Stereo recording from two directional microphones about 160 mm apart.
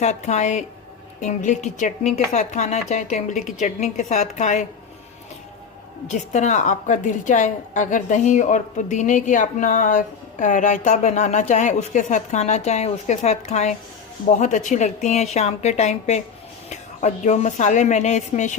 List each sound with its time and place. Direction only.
0.0 s a woman's voice: 45° left (ahead or behind)
6.1 s a woman's voice: 45° left (ahead or behind)